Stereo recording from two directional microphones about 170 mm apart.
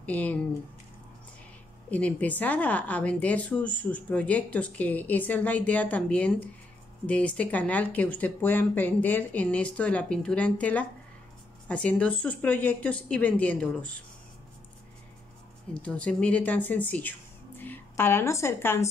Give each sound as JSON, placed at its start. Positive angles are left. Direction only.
{"t": 0.0, "sound": "speech", "side_deg": 10}
{"t": 1.9, "sound": "speech", "side_deg": 10}
{"t": 15.7, "sound": "a woman's voice", "side_deg": 5}